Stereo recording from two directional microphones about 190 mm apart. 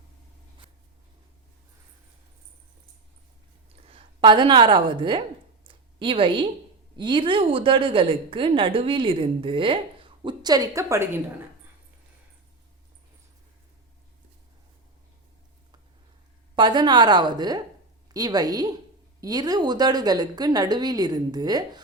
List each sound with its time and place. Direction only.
3.8 s a woman's voice: 30° right (ahead or behind)
5.6 s a sound: 25° right (ahead or behind)
6.9 s a woman's voice: 25° right (ahead or behind)
16.6 s a woman's voice: 25° right (ahead or behind)